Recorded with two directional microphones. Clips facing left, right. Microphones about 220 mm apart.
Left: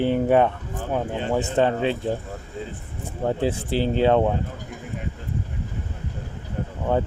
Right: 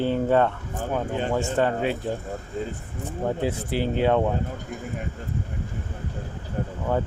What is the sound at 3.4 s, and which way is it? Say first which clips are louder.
Speech: left 4 dB; 30° left (ahead or behind).